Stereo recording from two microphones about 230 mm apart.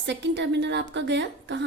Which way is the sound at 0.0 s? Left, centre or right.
Right.